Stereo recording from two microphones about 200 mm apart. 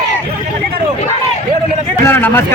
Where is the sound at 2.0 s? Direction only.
10° left (ahead or behind).